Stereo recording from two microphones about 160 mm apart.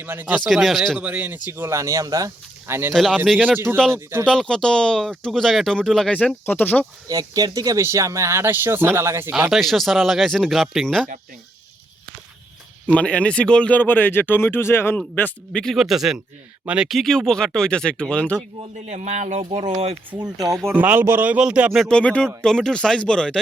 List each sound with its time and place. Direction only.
0.0 s speech: 10° right (ahead or behind)
0.3 s speech: centre (ahead or behind); by 2.9 s 15° right (ahead or behind)
2.9 s speech: centre (ahead or behind)
3.4 s speech: 10° right (ahead or behind)
4.3 s speech: 5° left (ahead or behind)
7.1 s speech: 25° right (ahead or behind)
9.3 s speech: centre (ahead or behind)
12.9 s speech: 5° left (ahead or behind)
18.9 s speech: 45° right (ahead or behind)
19.5 s speech: 30° right (ahead or behind)
20.7 s speech: 10° right (ahead or behind); by 23.4 s 5° left (ahead or behind)